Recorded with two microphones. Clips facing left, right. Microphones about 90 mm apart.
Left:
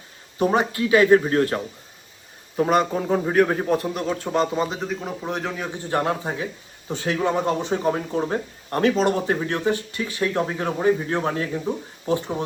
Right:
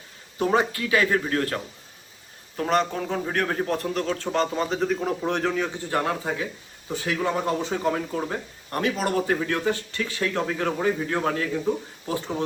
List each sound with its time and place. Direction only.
0.3 s speech: 20° left (ahead or behind)
2.6 s a man's voice: 10° left (ahead or behind)
5.9 s speech: 25° left (ahead or behind)